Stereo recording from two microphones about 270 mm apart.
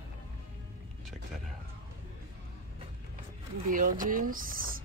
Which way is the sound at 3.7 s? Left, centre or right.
Right.